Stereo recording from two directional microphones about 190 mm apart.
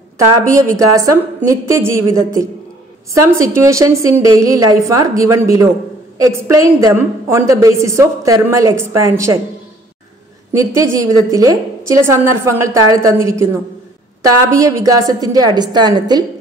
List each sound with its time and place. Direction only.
0.6 s a woman's voice: 15° right (ahead or behind)
10.5 s a woman's voice: 15° right (ahead or behind)
14.5 s a woman's voice: 15° right (ahead or behind)